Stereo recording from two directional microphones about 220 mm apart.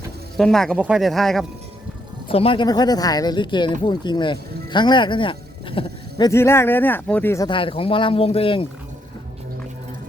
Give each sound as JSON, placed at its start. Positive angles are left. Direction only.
{"t": 0.3, "sound": "speech", "side_deg": 0}
{"t": 2.3, "sound": "speech", "side_deg": 25}